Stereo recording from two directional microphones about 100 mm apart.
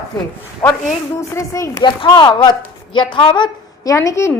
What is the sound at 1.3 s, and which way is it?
Speech, 30° left (ahead or behind).